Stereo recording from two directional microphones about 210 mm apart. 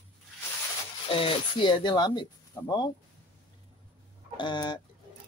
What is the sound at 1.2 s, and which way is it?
Speech, 25° left (ahead or behind).